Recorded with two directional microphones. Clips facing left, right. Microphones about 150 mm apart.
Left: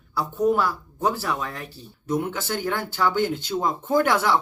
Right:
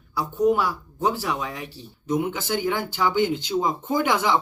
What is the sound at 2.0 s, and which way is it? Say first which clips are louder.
Speech: right 1 dB; centre (ahead or behind).